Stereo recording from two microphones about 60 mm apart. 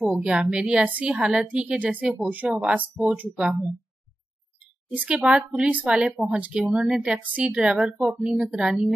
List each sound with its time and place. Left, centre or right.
0.2 s a woman's voice: centre
4.9 s a woman's voice: right
6.6 s a woman's voice: centre